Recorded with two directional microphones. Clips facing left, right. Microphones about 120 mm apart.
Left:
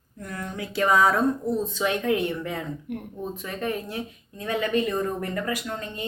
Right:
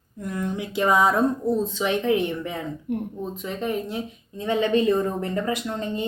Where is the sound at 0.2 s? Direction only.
20° right (ahead or behind).